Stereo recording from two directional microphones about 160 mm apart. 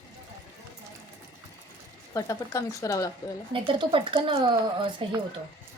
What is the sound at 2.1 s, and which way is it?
Speech, 20° left (ahead or behind).